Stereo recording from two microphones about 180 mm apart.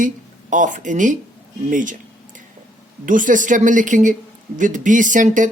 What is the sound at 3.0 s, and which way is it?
Speech, 45° right (ahead or behind).